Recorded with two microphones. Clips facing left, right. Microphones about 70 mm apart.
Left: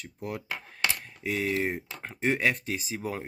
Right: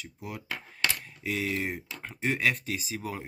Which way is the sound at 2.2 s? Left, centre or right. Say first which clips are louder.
Left 2 dB; left.